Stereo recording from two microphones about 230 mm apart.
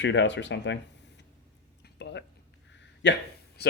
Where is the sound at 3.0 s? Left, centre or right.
Left.